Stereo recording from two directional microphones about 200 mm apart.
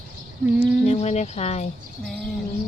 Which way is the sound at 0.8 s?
35° left (ahead or behind).